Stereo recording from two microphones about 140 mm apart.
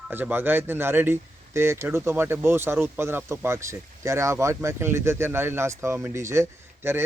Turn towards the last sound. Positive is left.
turn(degrees=-15)  # may be behind; listen again after turning